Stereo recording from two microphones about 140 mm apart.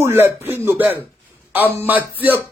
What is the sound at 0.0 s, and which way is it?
A man's voice, 15° right (ahead or behind).